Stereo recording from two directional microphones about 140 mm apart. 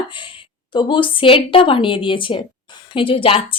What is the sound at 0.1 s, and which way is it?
A woman's voice, 35° left (ahead or behind).